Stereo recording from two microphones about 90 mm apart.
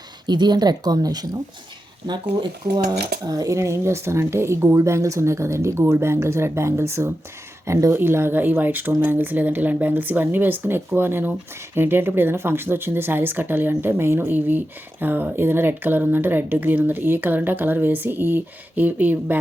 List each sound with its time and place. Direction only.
0.3 s speech: 55° right (ahead or behind)
3.2 s a woman's voice: 40° right (ahead or behind); by 19.4 s 20° right (ahead or behind)